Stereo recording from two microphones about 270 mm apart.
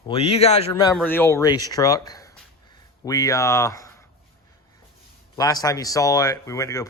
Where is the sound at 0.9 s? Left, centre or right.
Centre.